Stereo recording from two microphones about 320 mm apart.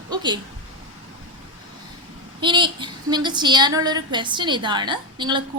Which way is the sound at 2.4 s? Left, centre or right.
Centre.